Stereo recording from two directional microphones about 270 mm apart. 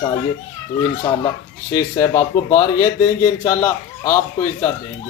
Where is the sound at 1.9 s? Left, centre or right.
Centre.